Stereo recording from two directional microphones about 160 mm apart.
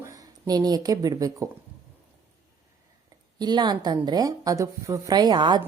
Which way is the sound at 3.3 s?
25° right (ahead or behind).